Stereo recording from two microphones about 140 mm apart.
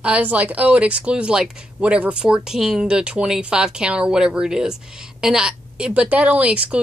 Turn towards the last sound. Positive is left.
turn(degrees=-10)  # may be behind; listen again after turning